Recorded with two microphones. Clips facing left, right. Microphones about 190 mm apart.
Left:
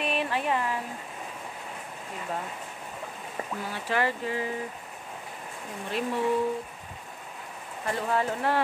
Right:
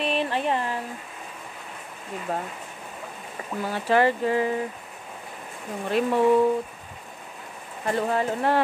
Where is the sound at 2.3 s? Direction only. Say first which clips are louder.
Right 5 dB; 45° right (ahead or behind).